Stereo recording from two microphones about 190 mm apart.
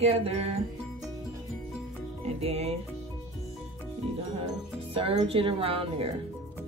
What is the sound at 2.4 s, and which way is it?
Speech, 35° right (ahead or behind).